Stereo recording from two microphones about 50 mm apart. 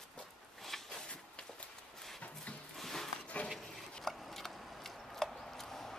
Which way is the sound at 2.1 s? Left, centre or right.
Left.